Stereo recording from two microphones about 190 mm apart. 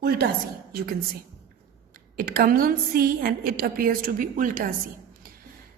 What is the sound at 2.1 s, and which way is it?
A woman's voice, 50° right (ahead or behind).